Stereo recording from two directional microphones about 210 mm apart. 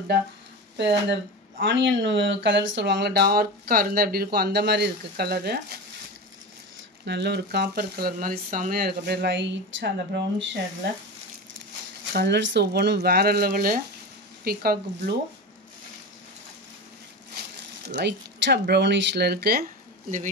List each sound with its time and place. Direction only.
1.6 s speech: 60° right (ahead or behind)
7.1 s speech: 55° right (ahead or behind)
12.1 s speech: 50° right (ahead or behind)
17.8 s speech: 55° right (ahead or behind)